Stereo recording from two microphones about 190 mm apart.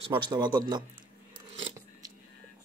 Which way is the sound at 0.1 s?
20° right (ahead or behind).